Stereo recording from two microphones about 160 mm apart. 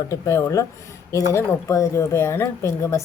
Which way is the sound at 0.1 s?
15° left (ahead or behind).